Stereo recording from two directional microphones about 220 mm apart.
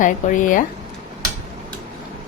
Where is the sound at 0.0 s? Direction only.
35° left (ahead or behind).